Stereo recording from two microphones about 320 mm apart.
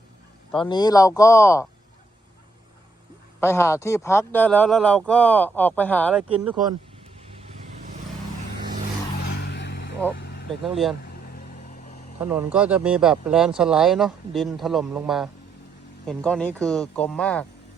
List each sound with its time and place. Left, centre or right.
0.5 s speech: centre
3.4 s speech: centre
6.4 s speech: centre
7.3 s vehicle: centre
9.2 s vehicle: left
10.6 s speech: centre
11.0 s vehicle: left
12.2 s speech: centre